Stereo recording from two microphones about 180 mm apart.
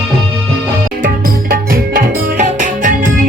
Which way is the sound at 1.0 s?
55° right (ahead or behind).